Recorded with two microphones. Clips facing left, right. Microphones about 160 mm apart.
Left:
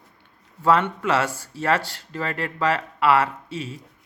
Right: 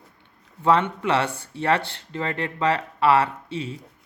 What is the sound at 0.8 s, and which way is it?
Speech, 25° right (ahead or behind).